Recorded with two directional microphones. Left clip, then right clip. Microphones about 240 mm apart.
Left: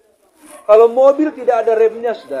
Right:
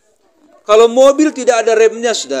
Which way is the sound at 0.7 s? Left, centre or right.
Right.